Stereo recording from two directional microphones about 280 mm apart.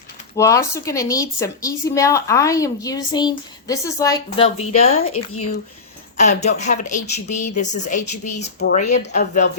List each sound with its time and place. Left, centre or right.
0.3 s a woman's voice: centre